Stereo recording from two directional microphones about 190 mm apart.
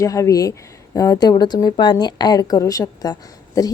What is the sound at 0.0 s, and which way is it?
Speech, 15° left (ahead or behind).